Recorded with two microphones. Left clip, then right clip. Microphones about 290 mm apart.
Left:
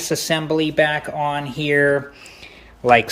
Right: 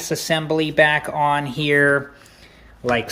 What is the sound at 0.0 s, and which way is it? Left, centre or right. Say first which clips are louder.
Speech: left 1 dB; centre.